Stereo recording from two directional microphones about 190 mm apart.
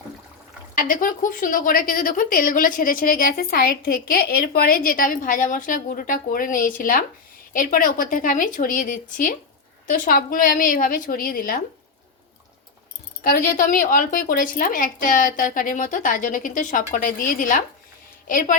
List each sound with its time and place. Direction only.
0.8 s a woman's voice: 45° left (ahead or behind)
13.2 s a woman's voice: 50° left (ahead or behind)